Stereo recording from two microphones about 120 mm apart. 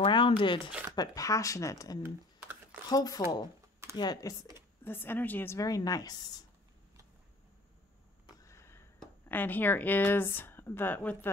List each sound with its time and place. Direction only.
0.0 s a sound: 45° left (ahead or behind)
0.4 s speech: 45° left (ahead or behind)
0.9 s a woman's voice: 30° left (ahead or behind)
2.0 s typing: 20° right (ahead or behind)
2.9 s speech: 30° left (ahead or behind)
4.8 s a woman's voice: 20° left (ahead or behind)
8.5 s a sound: 20° left (ahead or behind)
9.3 s a woman's voice: 15° left (ahead or behind)